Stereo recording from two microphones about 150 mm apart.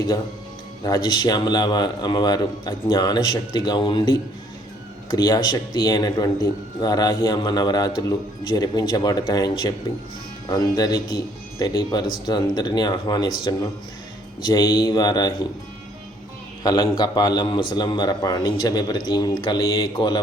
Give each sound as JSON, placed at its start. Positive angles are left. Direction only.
{"t": 0.8, "sound": "a man's voice", "side_deg": 25}
{"t": 16.6, "sound": "a man's voice", "side_deg": 25}